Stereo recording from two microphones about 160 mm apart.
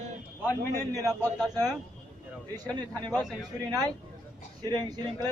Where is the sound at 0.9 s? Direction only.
20° right (ahead or behind).